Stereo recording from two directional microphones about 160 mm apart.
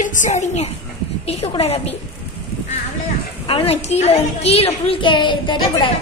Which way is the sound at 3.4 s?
35° left (ahead or behind).